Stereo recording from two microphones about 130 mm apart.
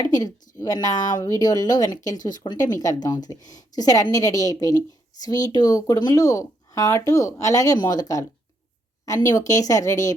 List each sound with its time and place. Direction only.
0.0 s speech: 30° left (ahead or behind)